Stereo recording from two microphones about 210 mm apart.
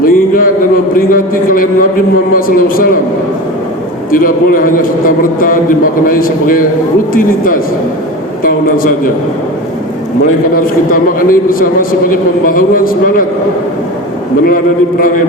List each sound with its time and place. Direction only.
0.0 s a sound: 40° left (ahead or behind)
0.9 s a man's voice: 40° left (ahead or behind)
4.1 s a man's voice: 45° left (ahead or behind)
10.5 s a man's voice: 40° left (ahead or behind)